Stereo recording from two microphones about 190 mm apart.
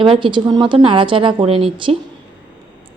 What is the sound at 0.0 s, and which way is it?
Speech, 25° right (ahead or behind).